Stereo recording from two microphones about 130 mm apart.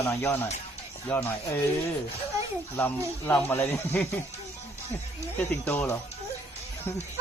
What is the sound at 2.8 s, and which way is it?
Speech, 15° left (ahead or behind).